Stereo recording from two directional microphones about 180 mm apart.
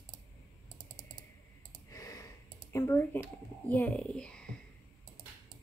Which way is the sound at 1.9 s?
15° left (ahead or behind).